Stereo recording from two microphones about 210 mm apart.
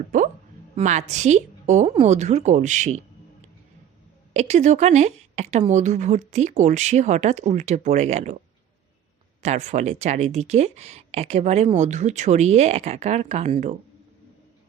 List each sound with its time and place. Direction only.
0.1 s speech: 40° right (ahead or behind)
4.4 s speech: 30° right (ahead or behind)
9.4 s speech: 35° right (ahead or behind)